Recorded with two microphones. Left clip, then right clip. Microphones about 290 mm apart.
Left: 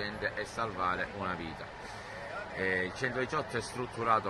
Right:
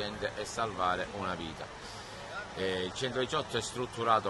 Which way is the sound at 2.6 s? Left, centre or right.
Centre.